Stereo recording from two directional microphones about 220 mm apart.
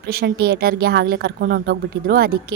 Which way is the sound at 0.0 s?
45° right (ahead or behind).